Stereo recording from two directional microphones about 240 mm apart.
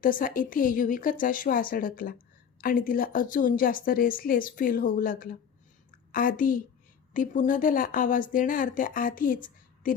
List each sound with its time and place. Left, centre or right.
0.0 s speech: left